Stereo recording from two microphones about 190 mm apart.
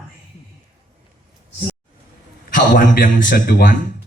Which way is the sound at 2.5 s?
45° left (ahead or behind).